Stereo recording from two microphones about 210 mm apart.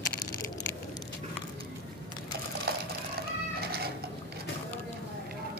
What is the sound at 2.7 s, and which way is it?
Sewing machine, 45° right (ahead or behind).